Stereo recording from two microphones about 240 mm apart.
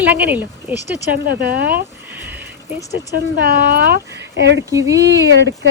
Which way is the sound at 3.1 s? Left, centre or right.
Right.